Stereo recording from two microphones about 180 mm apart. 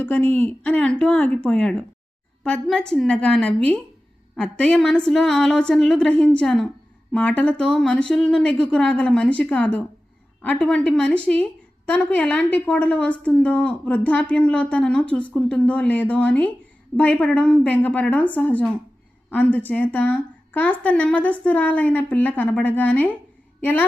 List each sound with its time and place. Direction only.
0.0 s a woman's voice: 10° left (ahead or behind)